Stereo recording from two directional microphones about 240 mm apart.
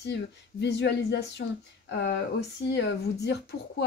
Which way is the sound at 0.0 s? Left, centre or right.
Left.